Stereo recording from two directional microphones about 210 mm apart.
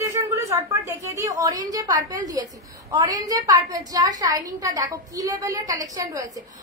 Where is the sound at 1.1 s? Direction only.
15° right (ahead or behind).